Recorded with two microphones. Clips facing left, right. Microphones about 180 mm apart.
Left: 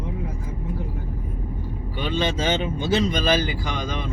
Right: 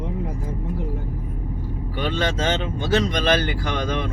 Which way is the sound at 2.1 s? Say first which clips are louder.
Left 1 dB; 10° left (ahead or behind).